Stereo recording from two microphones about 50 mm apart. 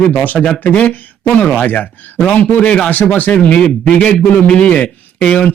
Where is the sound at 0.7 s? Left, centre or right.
Left.